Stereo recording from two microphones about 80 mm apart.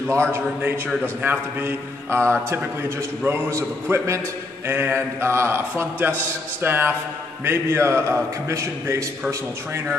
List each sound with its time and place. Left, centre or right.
0.1 s a man's voice: right